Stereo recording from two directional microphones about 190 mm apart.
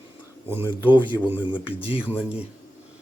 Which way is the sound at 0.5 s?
10° right (ahead or behind).